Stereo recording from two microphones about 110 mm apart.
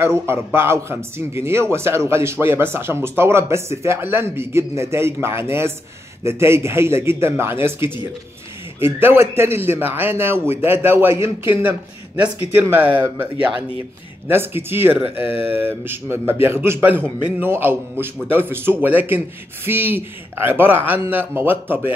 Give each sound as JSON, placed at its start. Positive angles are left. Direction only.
{"t": 0.0, "sound": "a man's voice", "side_deg": -20}
{"t": 8.7, "sound": "a man's voice", "side_deg": -20}